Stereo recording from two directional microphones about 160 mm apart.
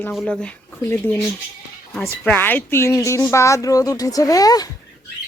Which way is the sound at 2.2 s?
10° left (ahead or behind).